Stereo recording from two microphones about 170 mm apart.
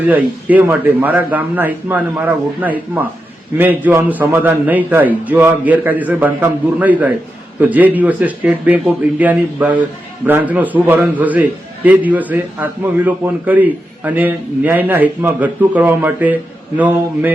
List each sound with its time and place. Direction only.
0.1 s a man's voice: 10° right (ahead or behind)